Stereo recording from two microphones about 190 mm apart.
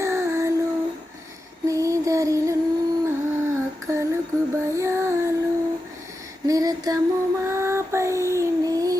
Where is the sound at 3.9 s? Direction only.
15° right (ahead or behind).